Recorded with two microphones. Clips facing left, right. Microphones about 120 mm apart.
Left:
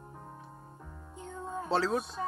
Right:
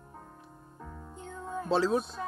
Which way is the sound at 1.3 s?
25° left (ahead or behind).